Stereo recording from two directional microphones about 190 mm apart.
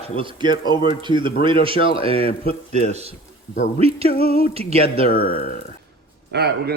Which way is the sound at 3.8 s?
30° right (ahead or behind).